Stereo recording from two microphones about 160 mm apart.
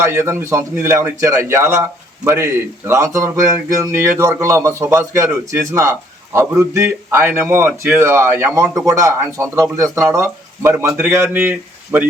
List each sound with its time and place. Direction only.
0.0 s a man's voice: 15° right (ahead or behind)